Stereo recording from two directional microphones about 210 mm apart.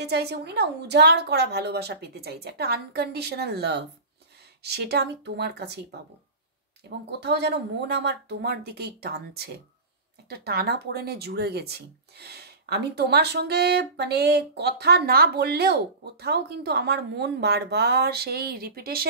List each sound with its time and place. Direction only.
0.0 s speech: 50° right (ahead or behind)